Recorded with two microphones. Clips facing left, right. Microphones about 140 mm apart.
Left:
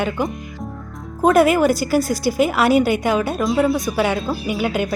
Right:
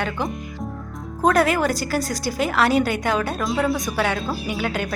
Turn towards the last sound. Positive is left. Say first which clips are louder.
# left 4 dB
turn(degrees=10)  # may be behind; listen again after turning